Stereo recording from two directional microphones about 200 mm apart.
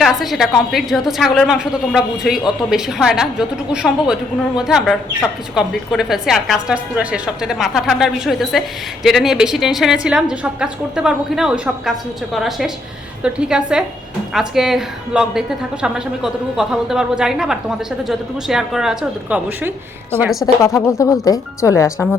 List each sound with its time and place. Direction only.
0.0 s a woman's voice: centre (ahead or behind)
20.4 s speech: 15° left (ahead or behind)